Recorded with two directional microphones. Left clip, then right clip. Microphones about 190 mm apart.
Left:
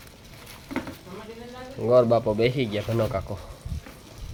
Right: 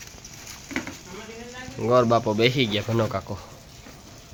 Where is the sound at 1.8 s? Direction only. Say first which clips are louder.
Even; 5° right (ahead or behind).